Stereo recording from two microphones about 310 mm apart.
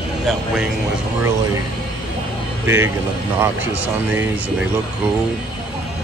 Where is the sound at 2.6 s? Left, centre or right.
Centre.